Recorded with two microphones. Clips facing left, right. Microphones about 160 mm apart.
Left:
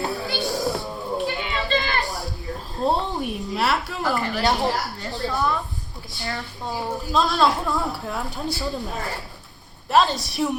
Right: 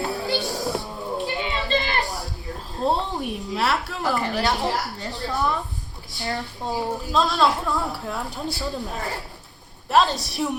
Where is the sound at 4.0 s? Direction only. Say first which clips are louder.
Even; 20° right (ahead or behind).